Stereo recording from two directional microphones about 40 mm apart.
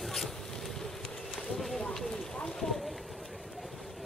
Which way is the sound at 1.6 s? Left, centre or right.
Centre.